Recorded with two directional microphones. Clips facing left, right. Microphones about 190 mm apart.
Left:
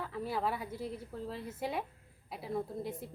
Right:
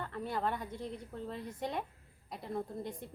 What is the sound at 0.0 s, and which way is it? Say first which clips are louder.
A woman's voice: left 1 dB; 5° left (ahead or behind).